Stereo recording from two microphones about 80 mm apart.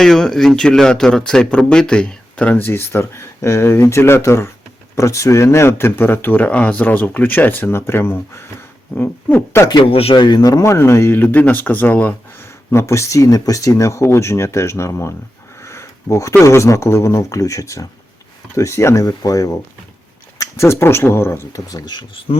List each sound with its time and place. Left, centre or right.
0.0 s speech: centre
2.6 s speech: left
9.6 s speech: left
10.7 s speech: left; by 12.1 s centre
12.7 s speech: left
15.6 s sniff: left
16.4 s speech: left
20.4 s speech: left
21.5 s speech: left